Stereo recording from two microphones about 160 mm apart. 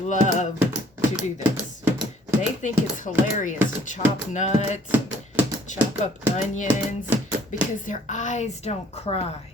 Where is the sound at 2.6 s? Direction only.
50° left (ahead or behind).